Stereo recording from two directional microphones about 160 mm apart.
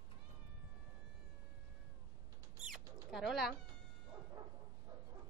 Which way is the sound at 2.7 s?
Centre (ahead or behind).